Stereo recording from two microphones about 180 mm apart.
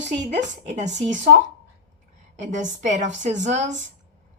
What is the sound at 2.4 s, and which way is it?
A woman's voice, 45° right (ahead or behind).